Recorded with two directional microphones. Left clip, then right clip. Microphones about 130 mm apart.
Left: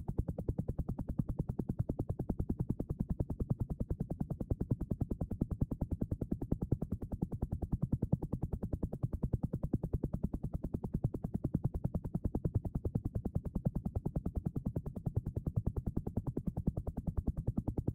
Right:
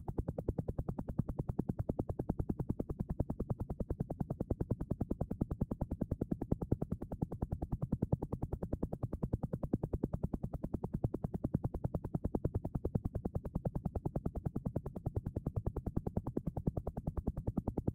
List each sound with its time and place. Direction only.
1.1 s music: 35° right (ahead or behind)
4.2 s music: 35° right (ahead or behind)
15.9 s music: 35° right (ahead or behind)